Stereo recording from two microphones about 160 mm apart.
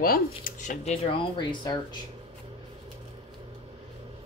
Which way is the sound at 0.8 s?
40° left (ahead or behind).